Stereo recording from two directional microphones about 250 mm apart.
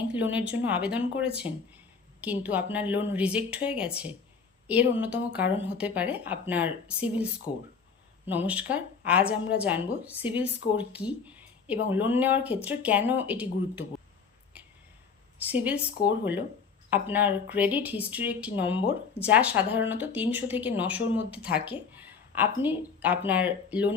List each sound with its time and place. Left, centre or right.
0.1 s speech: centre
7.5 s speech: centre
8.3 s speech: centre
15.4 s a woman's voice: centre